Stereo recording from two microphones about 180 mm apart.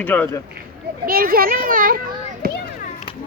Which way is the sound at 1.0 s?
55° right (ahead or behind).